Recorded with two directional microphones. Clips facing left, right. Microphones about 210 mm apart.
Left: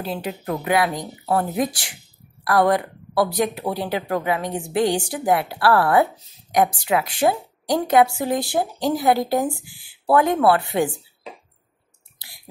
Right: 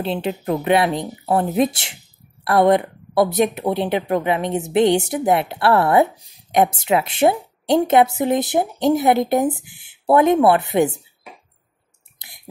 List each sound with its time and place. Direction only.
0.0 s a woman's voice: 25° right (ahead or behind)
6.5 s a woman's voice: 25° right (ahead or behind)
12.2 s a sound: 20° right (ahead or behind)